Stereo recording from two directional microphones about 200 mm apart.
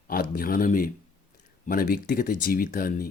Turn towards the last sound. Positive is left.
turn(degrees=45)  # may be behind; listen again after turning